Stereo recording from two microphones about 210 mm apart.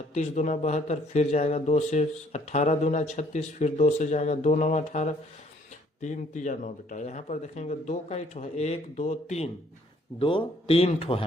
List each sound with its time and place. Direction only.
0.1 s speech: 35° left (ahead or behind)